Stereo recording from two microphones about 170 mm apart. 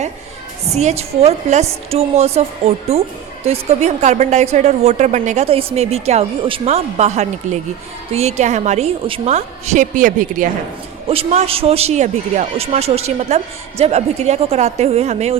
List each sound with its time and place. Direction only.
0.7 s speech: 40° right (ahead or behind)
11.1 s speech: 35° right (ahead or behind)